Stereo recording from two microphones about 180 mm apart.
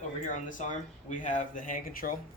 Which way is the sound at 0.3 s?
45° left (ahead or behind).